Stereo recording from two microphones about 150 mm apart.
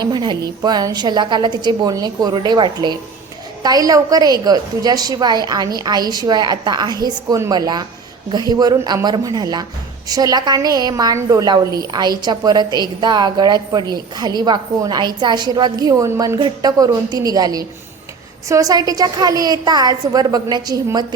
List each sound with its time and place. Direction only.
0.0 s a woman's voice: 30° right (ahead or behind)